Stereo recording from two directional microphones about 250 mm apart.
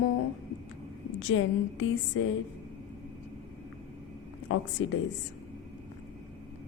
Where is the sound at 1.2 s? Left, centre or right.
Left.